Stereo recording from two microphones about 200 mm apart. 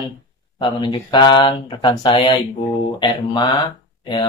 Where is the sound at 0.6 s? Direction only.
20° left (ahead or behind).